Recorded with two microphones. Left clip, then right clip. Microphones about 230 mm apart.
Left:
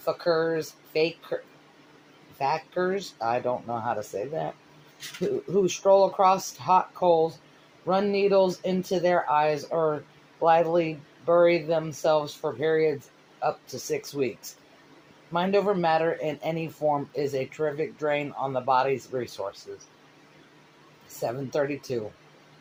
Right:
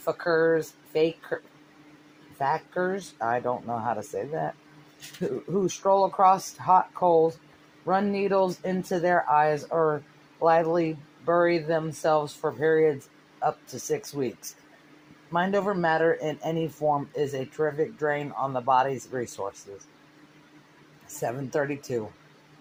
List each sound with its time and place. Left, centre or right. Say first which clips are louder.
0.0 s speech: right 1 dB; right
2.4 s speech: even; right
5.6 s speech: left 2 dB; right
15.3 s speech: left 1 dB; right
21.2 s speech: left 1 dB; right